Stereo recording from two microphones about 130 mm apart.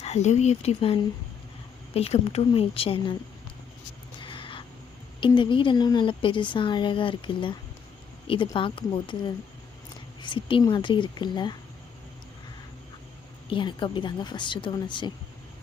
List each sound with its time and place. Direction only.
0.0 s speech: 60° left (ahead or behind)
4.2 s a sound: 40° left (ahead or behind)
5.2 s speech: 40° left (ahead or behind)
13.5 s speech: 40° left (ahead or behind)